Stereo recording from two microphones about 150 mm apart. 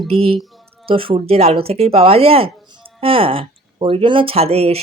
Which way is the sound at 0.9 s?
35° right (ahead or behind).